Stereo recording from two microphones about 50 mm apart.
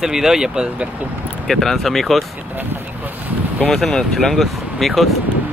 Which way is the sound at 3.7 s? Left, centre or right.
Centre.